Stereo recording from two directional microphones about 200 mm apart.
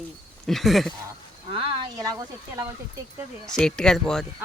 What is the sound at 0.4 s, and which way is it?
Speech, centre (ahead or behind).